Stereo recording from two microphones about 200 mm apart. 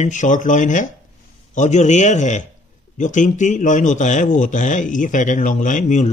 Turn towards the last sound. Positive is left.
turn(degrees=40)  # may be behind; listen again after turning